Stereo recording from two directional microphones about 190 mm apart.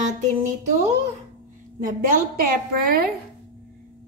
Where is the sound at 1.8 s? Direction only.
50° right (ahead or behind).